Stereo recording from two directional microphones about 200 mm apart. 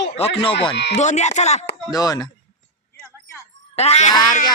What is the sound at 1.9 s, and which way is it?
Speech, 20° left (ahead or behind).